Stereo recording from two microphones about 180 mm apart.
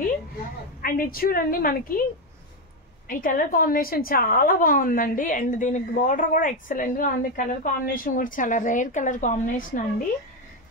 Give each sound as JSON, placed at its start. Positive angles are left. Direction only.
{"t": 0.8, "sound": "a woman's voice", "side_deg": 50}
{"t": 3.1, "sound": "a woman's voice", "side_deg": 50}